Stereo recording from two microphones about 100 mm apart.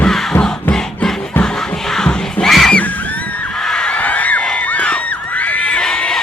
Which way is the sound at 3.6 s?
10° left (ahead or behind).